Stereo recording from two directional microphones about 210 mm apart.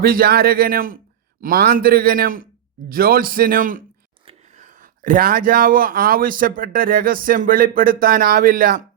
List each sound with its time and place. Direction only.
0.0 s a man's voice: 45° right (ahead or behind)